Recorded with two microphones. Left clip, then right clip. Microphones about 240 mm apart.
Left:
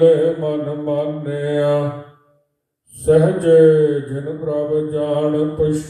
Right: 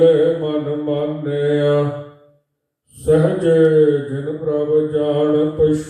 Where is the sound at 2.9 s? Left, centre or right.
Left.